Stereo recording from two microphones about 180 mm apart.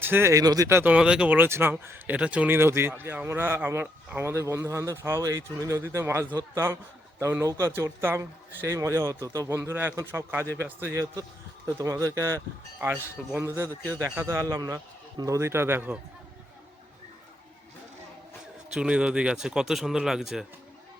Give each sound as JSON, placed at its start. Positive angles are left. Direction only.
{"t": 0.0, "sound": "speech", "side_deg": -10}
{"t": 18.7, "sound": "speech", "side_deg": -5}